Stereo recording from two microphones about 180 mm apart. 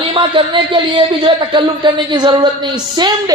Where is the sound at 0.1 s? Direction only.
30° right (ahead or behind).